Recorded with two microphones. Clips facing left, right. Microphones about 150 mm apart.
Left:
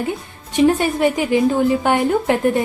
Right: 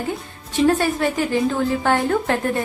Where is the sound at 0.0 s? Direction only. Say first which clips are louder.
Left 3 dB; 15° left (ahead or behind).